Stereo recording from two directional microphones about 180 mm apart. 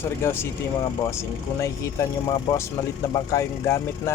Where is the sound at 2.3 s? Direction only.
15° left (ahead or behind).